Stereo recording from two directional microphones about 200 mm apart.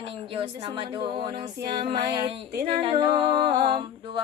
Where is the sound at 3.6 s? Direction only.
25° right (ahead or behind).